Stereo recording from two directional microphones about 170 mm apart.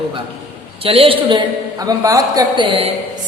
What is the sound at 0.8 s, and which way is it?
A man's voice, 35° right (ahead or behind).